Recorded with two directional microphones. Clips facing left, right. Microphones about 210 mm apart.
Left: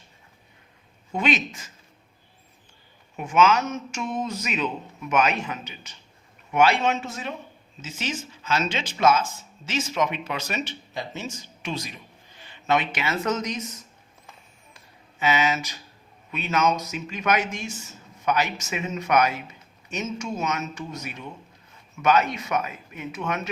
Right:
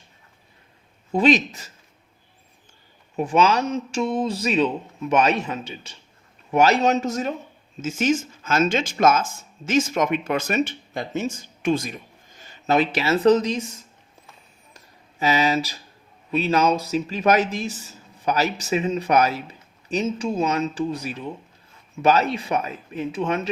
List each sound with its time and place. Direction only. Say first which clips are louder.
1.1 s speech: right 7 dB; 35° right (ahead or behind)
3.2 s speech: right 1 dB; 35° right (ahead or behind)
15.2 s speech: right 3 dB; 35° right (ahead or behind)